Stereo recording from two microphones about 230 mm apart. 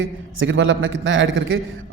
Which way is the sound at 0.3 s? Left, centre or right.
Right.